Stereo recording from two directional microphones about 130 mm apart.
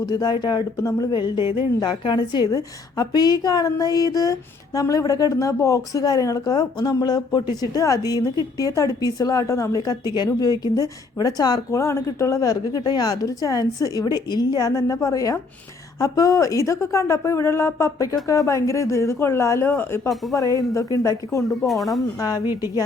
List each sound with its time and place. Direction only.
0.1 s a woman's voice: 30° left (ahead or behind)
21.7 s speech: centre (ahead or behind)